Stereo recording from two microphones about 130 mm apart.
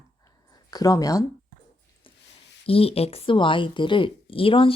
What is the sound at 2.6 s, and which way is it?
Speech, 45° left (ahead or behind).